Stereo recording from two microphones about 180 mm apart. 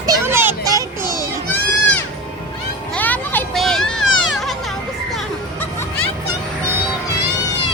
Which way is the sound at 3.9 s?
90° left.